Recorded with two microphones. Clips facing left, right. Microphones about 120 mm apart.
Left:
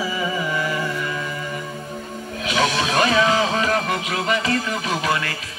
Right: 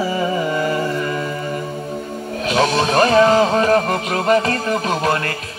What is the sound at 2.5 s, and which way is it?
Music, 40° right (ahead or behind).